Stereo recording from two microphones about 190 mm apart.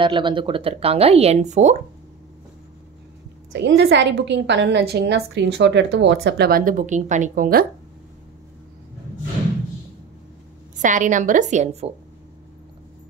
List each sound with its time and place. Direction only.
0.0 s speech: 25° right (ahead or behind)
3.5 s a woman's voice: 70° right (ahead or behind); by 7.6 s 45° right (ahead or behind)
10.8 s speech: 40° right (ahead or behind)